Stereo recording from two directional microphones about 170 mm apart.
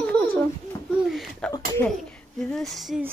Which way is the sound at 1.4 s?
5° left (ahead or behind).